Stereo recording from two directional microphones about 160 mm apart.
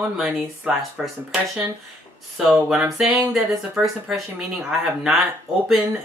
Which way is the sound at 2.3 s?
5° right (ahead or behind).